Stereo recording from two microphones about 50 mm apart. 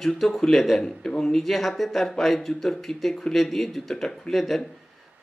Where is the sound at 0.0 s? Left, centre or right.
Centre.